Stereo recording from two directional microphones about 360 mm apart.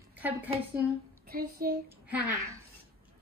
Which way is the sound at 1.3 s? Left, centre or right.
Right.